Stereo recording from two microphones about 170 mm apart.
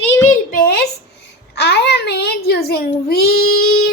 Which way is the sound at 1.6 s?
80° left.